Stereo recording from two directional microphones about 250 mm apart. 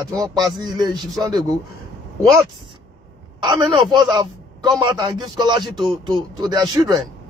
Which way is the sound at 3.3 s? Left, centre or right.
Centre.